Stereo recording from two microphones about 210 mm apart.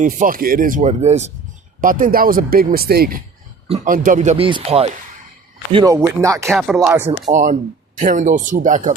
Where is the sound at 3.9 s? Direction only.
40° right (ahead or behind); by 6.5 s 15° right (ahead or behind).